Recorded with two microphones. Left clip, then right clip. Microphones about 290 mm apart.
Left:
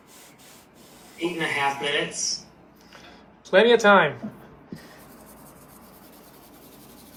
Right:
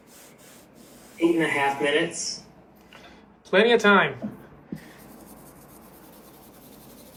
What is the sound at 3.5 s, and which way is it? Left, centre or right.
Speech, centre.